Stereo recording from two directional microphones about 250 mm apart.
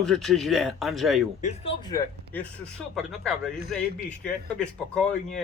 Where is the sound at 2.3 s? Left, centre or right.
Centre.